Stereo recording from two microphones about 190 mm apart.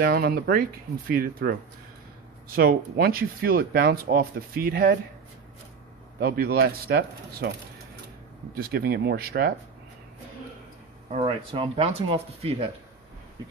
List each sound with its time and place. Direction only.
0.0 s speech: 50° right (ahead or behind)
6.1 s speech: 55° right (ahead or behind)
8.5 s speech: 55° right (ahead or behind)
11.1 s speech: 30° right (ahead or behind)